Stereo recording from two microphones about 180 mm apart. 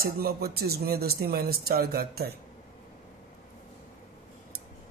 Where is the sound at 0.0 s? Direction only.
60° right (ahead or behind).